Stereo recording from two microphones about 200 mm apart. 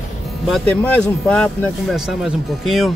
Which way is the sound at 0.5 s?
Centre (ahead or behind).